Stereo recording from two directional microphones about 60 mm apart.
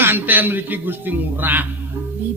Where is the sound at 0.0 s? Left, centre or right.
Right.